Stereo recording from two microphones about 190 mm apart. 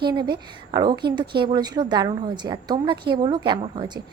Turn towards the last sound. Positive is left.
turn(degrees=-25)  # may be behind; listen again after turning